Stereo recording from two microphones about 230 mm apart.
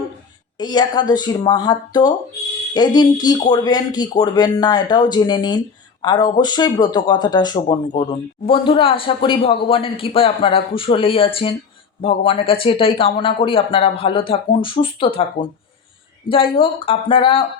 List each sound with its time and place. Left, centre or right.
0.6 s speech: centre